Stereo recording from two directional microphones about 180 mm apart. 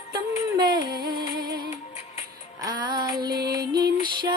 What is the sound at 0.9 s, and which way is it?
Music, 55° right (ahead or behind).